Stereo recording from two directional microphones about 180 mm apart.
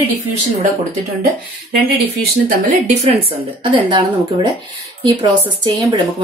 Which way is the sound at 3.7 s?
25° right (ahead or behind).